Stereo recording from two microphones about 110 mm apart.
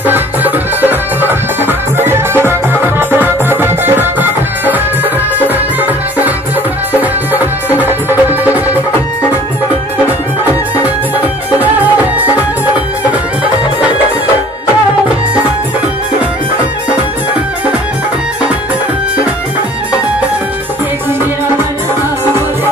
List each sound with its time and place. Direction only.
0.0 s music: 15° right (ahead or behind)